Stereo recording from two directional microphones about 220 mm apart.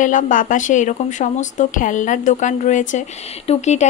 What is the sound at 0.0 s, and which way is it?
Speech, 35° left (ahead or behind).